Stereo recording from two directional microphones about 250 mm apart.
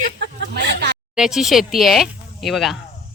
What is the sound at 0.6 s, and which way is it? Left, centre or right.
Speech, right.